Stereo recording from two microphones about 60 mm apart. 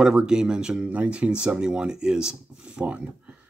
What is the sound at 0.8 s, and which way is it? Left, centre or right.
Speech, right.